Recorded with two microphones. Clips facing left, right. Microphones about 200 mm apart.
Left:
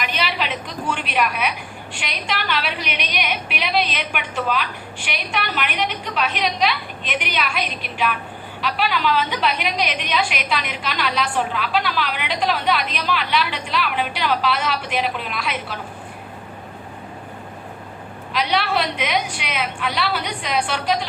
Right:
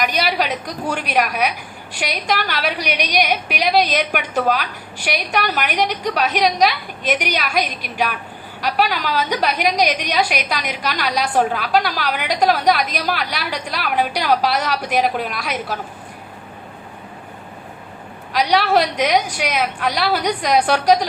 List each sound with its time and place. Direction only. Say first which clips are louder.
0.0 s a woman's voice: right 5 dB; 40° right (ahead or behind)
18.3 s a woman's voice: right 5 dB; 40° right (ahead or behind)